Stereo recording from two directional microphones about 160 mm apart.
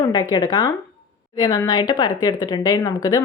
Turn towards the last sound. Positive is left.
turn(degrees=25)  # may be behind; listen again after turning